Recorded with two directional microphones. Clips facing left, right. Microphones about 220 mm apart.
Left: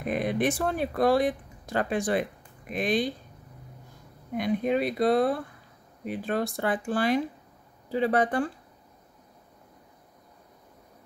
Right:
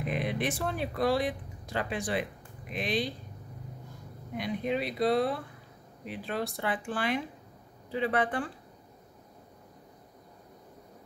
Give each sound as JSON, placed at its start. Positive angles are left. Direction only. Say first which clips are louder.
{"t": 0.0, "sound": "speech", "louder": "left 5 dB", "side_deg": 45}
{"t": 4.4, "sound": "speech", "louder": "left 6 dB", "side_deg": 50}